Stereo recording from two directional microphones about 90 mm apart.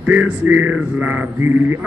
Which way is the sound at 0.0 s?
15° right (ahead or behind).